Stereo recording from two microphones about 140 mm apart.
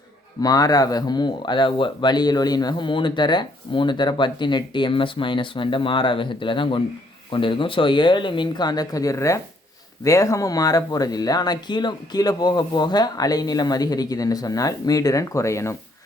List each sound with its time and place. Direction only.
0.4 s speech: 25° left (ahead or behind)